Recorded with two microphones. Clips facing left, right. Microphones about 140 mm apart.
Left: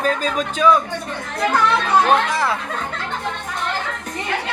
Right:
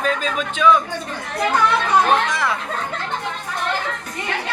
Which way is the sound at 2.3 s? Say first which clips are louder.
Left 2 dB; 30° left (ahead or behind).